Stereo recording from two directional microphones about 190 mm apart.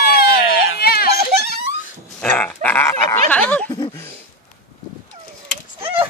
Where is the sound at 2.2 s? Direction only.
10° left (ahead or behind).